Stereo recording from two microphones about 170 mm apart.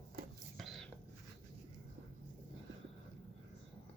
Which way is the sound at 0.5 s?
Centre (ahead or behind).